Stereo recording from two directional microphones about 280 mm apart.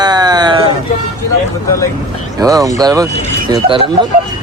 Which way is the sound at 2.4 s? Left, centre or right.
Centre.